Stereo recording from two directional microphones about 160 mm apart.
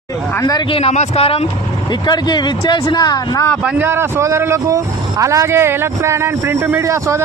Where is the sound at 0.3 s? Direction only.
25° left (ahead or behind).